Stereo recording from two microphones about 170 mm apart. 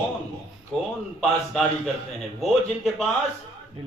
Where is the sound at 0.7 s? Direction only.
Centre (ahead or behind).